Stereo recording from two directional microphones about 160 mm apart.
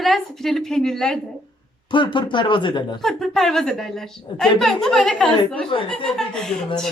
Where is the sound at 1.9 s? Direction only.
30° left (ahead or behind).